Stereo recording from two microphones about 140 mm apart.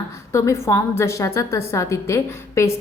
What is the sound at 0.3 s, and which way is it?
A woman's voice, 20° left (ahead or behind).